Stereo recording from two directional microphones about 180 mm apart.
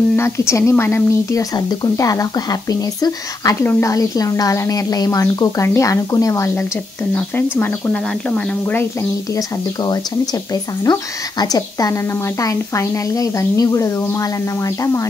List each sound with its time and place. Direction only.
0.1 s speech: 15° left (ahead or behind)
10.5 s speech: 20° left (ahead or behind)